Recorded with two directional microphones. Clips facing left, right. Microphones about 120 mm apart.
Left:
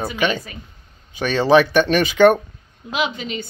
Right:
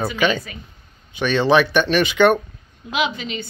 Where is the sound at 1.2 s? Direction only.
35° left (ahead or behind).